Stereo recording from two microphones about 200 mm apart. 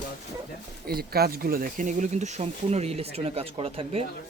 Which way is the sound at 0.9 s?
50° right (ahead or behind).